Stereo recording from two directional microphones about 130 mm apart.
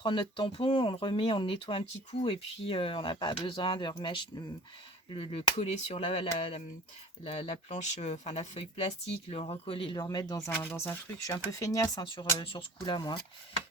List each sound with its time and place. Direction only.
0.0 s speech: 40° left (ahead or behind)
12.0 s speech: 40° left (ahead or behind)